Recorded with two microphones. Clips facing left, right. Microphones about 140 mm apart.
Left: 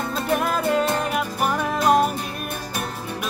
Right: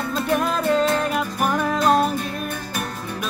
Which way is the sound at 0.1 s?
5° left (ahead or behind).